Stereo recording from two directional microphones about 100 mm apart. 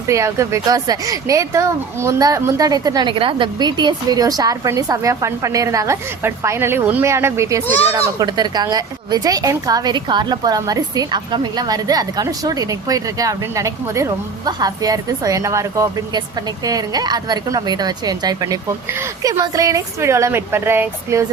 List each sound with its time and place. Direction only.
0.1 s a woman's voice: 30° right (ahead or behind)